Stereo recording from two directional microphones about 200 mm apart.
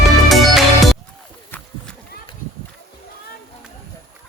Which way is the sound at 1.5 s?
5° left (ahead or behind).